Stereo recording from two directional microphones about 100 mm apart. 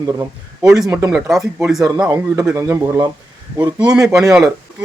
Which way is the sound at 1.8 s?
35° right (ahead or behind).